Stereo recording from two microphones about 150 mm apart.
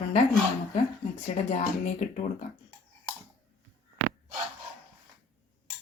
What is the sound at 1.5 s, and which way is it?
Speech, 60° left (ahead or behind).